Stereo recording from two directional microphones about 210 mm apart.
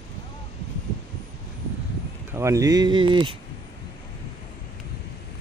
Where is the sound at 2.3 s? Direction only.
15° right (ahead or behind).